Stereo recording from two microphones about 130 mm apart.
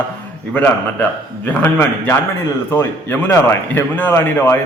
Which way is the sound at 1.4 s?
15° left (ahead or behind).